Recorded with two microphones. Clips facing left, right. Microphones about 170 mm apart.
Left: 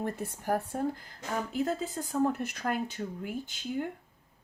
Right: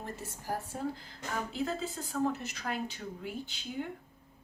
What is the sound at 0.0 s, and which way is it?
Speech, 60° left (ahead or behind).